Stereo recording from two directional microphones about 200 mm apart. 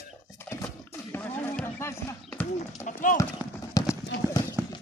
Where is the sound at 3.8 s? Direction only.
15° left (ahead or behind).